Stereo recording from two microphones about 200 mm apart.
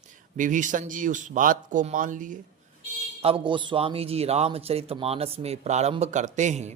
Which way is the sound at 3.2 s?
25° right (ahead or behind).